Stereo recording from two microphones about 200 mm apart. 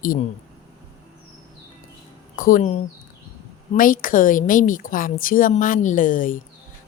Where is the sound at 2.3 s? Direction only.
45° left (ahead or behind).